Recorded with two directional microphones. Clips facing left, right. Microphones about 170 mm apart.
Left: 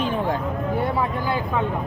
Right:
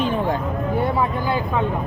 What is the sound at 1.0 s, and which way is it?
Speech, 20° right (ahead or behind).